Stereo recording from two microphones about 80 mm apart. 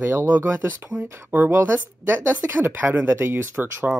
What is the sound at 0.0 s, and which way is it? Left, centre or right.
Speech, right.